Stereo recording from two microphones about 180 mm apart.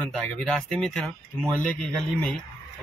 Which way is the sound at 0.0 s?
5° left (ahead or behind).